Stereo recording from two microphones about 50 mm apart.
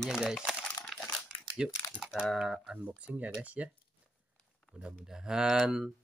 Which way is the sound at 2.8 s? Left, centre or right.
Right.